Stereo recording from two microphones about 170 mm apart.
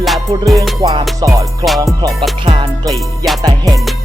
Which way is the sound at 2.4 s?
25° right (ahead or behind).